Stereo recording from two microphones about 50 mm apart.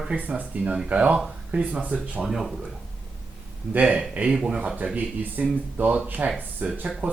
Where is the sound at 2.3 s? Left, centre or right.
Centre.